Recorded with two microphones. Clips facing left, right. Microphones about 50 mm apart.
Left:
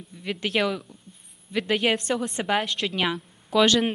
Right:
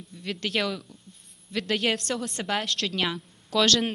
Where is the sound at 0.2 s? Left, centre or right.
Centre.